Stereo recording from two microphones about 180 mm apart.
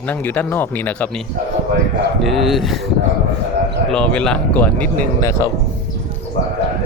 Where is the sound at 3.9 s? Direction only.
5° left (ahead or behind).